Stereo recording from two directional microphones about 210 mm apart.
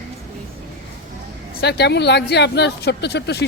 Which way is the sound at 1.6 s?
55° left (ahead or behind).